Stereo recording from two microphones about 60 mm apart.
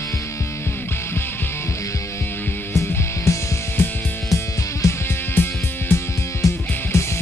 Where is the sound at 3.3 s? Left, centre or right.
Left.